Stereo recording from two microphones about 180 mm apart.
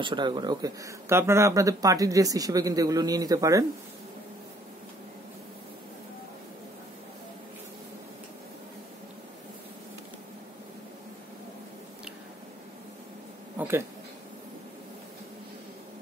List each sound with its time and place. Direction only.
0.0 s speech: 25° right (ahead or behind)
13.6 s speech: 15° right (ahead or behind)